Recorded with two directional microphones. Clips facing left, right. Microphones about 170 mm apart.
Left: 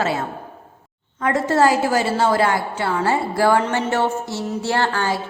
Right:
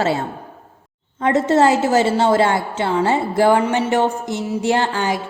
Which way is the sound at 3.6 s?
15° right (ahead or behind).